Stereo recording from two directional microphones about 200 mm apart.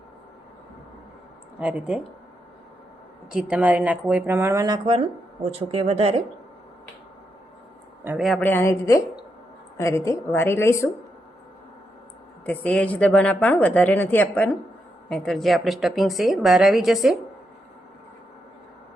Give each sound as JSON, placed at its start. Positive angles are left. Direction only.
{"t": 1.5, "sound": "speech", "side_deg": -5}
{"t": 3.3, "sound": "speech", "side_deg": -5}
{"t": 8.0, "sound": "a woman's voice", "side_deg": -5}
{"t": 8.4, "sound": "a woman's voice", "side_deg": 15}
{"t": 12.5, "sound": "a woman's voice", "side_deg": 5}